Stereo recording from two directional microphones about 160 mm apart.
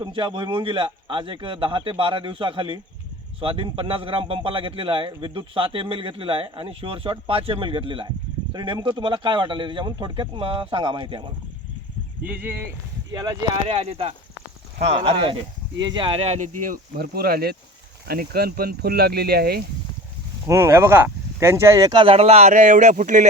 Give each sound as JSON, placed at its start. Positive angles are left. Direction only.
{"t": 0.0, "sound": "a man's voice", "side_deg": -30}
{"t": 12.2, "sound": "speech", "side_deg": -10}
{"t": 13.1, "sound": "speech", "side_deg": -25}
{"t": 13.7, "sound": "a man's voice", "side_deg": -40}
{"t": 20.5, "sound": "speech", "side_deg": -15}